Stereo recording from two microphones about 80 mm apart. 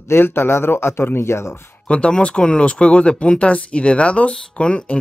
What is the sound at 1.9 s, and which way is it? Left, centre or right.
Speech, centre.